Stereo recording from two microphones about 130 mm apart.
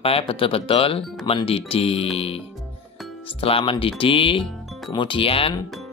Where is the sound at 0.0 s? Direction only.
45° left (ahead or behind).